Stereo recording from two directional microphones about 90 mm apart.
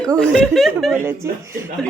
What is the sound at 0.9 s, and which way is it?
Speech, 25° right (ahead or behind).